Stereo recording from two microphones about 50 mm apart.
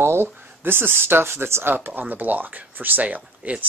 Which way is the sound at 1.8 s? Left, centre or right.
Right.